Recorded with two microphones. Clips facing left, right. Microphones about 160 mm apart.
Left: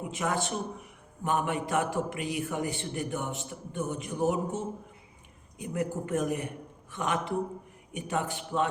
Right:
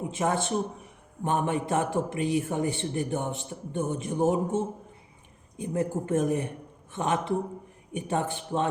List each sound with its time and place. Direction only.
0.1 s a man's voice: 25° right (ahead or behind)